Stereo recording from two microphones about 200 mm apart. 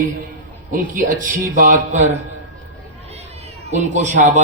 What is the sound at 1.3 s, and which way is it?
A man's voice, 45° right (ahead or behind).